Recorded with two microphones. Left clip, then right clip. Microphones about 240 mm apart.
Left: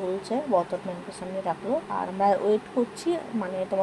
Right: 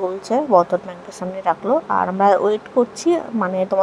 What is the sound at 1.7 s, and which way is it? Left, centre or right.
Speech, right.